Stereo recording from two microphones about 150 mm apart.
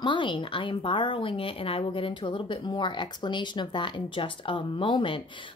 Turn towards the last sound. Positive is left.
turn(degrees=35)  # may be behind; listen again after turning